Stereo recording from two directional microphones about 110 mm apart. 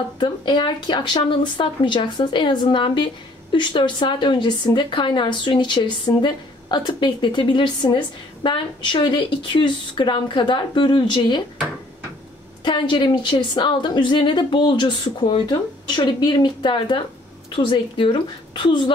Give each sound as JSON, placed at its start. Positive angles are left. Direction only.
{"t": 0.2, "sound": "speech", "side_deg": 45}
{"t": 12.6, "sound": "speech", "side_deg": 45}
{"t": 16.0, "sound": "speech", "side_deg": 40}